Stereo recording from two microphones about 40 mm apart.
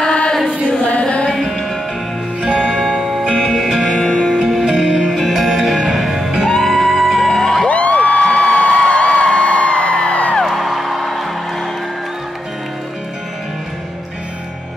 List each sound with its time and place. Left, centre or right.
0.0 s chant: left
0.7 s a sound: left
2.4 s music: centre
2.8 s music: centre
3.9 s music: centre
4.4 s music: centre
6.5 s music: centre
7.6 s a sound: left
10.4 s music: centre